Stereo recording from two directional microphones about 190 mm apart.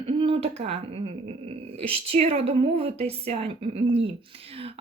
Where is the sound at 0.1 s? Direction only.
30° right (ahead or behind).